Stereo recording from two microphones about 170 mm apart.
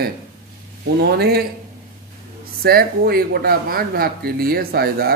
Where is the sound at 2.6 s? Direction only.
60° right (ahead or behind).